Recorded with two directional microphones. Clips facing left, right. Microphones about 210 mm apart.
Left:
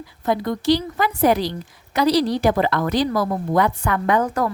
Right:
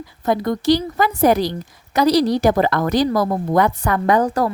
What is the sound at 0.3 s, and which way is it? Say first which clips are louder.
A woman's voice: right 2 dB; 45° right (ahead or behind).